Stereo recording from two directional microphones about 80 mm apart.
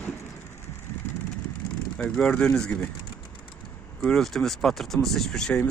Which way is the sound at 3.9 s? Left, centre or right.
Centre.